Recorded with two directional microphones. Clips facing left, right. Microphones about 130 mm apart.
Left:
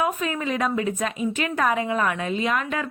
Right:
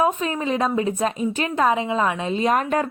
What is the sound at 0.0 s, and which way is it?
A woman's voice, 30° right (ahead or behind).